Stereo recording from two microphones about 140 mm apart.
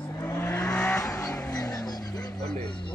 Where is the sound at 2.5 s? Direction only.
30° left (ahead or behind).